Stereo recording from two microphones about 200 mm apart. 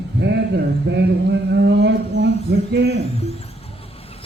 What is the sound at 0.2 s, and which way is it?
Speech, 60° right (ahead or behind).